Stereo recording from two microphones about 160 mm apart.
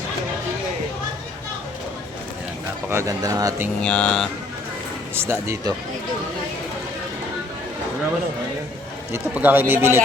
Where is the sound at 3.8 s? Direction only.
5° left (ahead or behind).